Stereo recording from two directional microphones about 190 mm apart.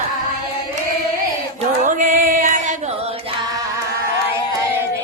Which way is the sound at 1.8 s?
45° right (ahead or behind).